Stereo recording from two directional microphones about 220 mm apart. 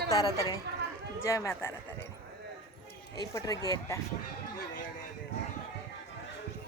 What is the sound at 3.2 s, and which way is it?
Speech, 15° left (ahead or behind).